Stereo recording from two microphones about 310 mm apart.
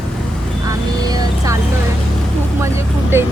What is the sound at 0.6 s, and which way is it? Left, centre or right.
Speech, centre.